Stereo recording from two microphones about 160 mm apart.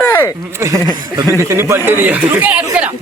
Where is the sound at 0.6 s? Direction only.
20° right (ahead or behind).